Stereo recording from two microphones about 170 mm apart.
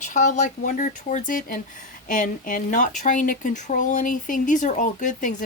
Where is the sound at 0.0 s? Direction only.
45° left (ahead or behind).